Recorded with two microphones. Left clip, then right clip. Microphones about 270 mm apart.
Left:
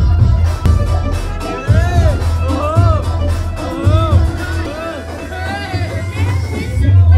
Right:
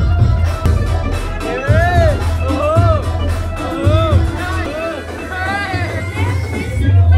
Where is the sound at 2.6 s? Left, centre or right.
Left.